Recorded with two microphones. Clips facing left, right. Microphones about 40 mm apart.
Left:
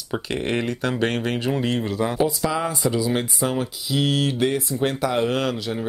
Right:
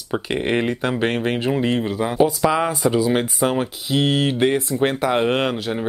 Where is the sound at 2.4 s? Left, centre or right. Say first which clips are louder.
Right 5 dB; right.